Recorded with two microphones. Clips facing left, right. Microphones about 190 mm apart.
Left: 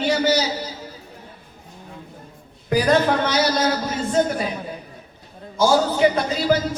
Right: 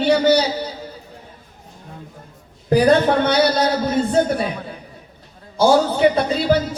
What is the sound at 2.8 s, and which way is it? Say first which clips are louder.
A man's voice: right 3 dB; 60° right (ahead or behind).